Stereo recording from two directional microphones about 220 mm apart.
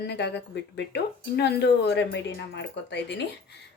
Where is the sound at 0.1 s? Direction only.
50° left (ahead or behind).